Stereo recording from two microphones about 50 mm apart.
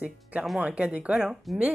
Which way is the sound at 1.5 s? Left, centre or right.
Centre.